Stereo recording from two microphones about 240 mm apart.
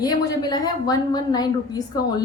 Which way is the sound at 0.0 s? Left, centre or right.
Centre.